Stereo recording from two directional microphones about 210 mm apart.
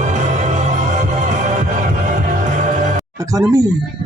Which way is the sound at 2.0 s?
35° right (ahead or behind).